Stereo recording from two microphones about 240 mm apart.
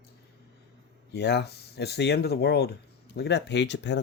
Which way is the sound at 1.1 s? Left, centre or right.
Left.